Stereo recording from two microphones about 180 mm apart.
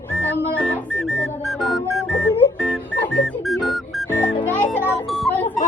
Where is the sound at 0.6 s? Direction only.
Centre (ahead or behind).